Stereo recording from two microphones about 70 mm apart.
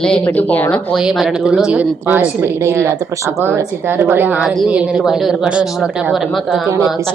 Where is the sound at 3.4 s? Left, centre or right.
Right.